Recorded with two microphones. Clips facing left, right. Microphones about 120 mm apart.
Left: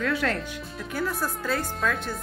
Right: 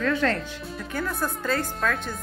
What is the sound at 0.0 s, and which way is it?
A woman's voice, 5° left (ahead or behind).